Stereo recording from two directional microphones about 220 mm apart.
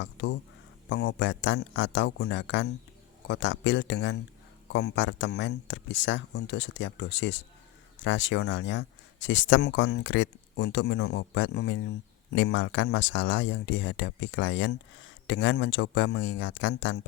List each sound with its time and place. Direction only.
0.0 s speech: 55° left (ahead or behind)